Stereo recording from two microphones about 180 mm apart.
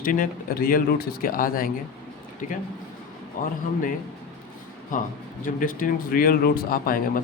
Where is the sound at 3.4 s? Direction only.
50° left (ahead or behind).